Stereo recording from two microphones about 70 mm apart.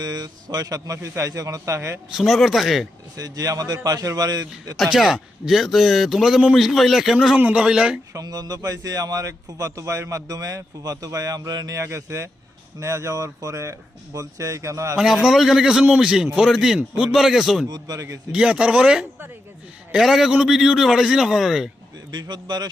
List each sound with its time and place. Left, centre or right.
0.0 s a man's voice: right
2.1 s a man's voice: centre
3.2 s a man's voice: right
4.8 s a man's voice: centre
7.3 s speech: right
7.6 s a man's voice: centre
8.1 s a man's voice: right
11.8 s speech: right
14.9 s a man's voice: centre
17.7 s speech: right
18.3 s a man's voice: centre
22.1 s a man's voice: right